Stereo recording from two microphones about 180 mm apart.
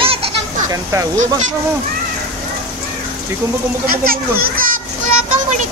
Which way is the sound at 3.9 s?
55° right (ahead or behind).